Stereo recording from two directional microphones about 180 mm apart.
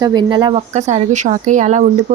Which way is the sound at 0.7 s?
40° right (ahead or behind).